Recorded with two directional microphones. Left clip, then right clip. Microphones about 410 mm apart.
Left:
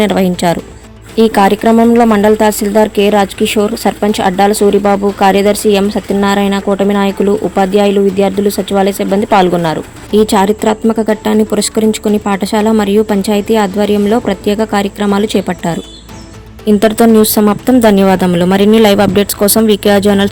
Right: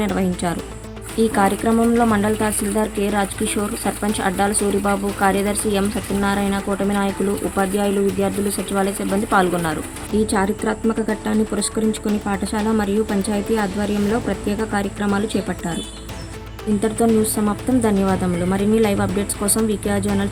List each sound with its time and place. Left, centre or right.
0.0 s speech: centre
16.8 s speech: left